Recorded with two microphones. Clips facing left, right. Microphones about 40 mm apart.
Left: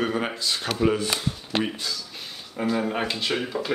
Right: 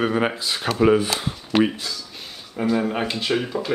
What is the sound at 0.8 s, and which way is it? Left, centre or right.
Speech, right.